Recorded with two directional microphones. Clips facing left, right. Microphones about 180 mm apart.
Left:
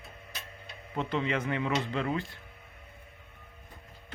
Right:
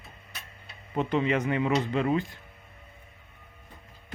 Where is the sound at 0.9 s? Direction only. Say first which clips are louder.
Right 5 dB; 15° right (ahead or behind).